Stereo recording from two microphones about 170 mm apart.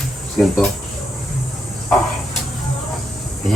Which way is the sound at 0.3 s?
Centre (ahead or behind).